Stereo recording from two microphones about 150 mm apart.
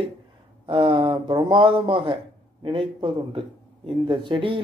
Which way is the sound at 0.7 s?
35° right (ahead or behind).